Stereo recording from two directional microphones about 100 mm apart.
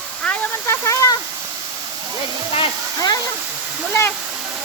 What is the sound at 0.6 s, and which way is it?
Speech, 30° left (ahead or behind).